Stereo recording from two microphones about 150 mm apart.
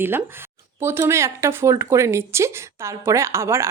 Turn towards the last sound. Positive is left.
turn(degrees=-15)  # may be behind; listen again after turning